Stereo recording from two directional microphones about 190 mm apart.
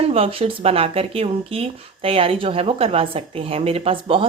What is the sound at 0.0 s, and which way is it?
Speech, 30° right (ahead or behind).